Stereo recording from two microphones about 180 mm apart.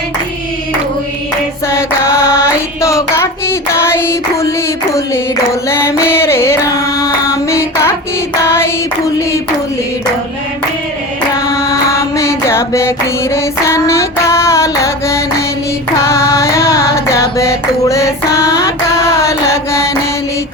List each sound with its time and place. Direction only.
1.6 s child singing: 15° left (ahead or behind)
5.6 s a sound: 15° left (ahead or behind)
6.1 s carnatic music: 15° left (ahead or behind)
7.5 s music: 15° left (ahead or behind)
8.4 s child singing: 15° left (ahead or behind)
11.9 s music: 15° left (ahead or behind)
13.3 s female singing: 15° left (ahead or behind)
16.0 s a sound: 15° left (ahead or behind)